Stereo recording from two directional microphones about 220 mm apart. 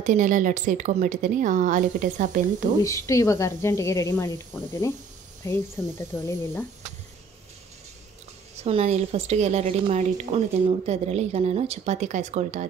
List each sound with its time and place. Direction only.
0.0 s a woman's voice: 35° right (ahead or behind)
2.8 s speech: 15° left (ahead or behind)
8.5 s a woman's voice: 30° right (ahead or behind)